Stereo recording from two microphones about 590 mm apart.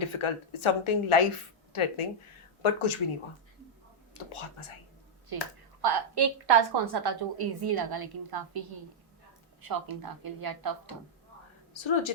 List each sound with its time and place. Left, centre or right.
0.0 s a woman's voice: left
5.3 s a woman's voice: right
11.8 s a woman's voice: left